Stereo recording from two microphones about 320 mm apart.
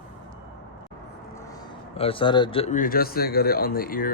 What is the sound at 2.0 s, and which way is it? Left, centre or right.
Speech, centre.